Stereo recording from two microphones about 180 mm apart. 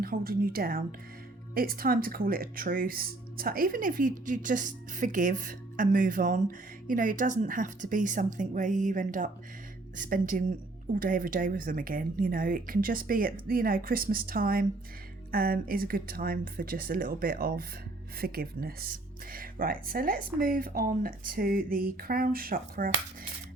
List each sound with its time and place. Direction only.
0.0 s speech: 55° right (ahead or behind)